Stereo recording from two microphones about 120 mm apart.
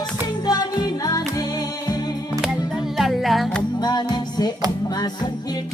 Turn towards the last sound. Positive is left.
turn(degrees=35)  # may be behind; listen again after turning